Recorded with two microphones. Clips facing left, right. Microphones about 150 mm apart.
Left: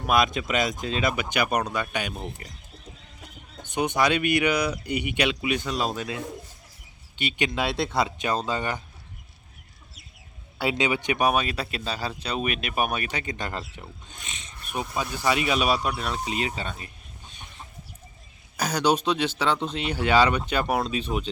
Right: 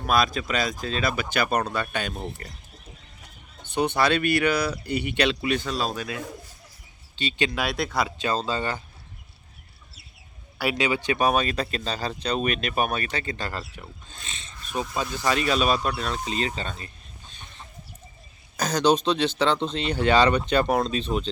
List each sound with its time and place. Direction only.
0.0 s speech: 20° left (ahead or behind)
3.7 s speech: 15° left (ahead or behind)
10.6 s speech: 20° left (ahead or behind)
18.5 s speech: 10° left (ahead or behind)